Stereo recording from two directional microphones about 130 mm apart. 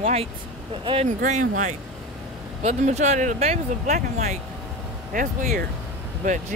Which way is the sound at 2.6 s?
60° right (ahead or behind).